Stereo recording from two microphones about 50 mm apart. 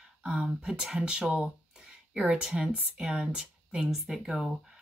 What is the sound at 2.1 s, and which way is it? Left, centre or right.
Speech, centre.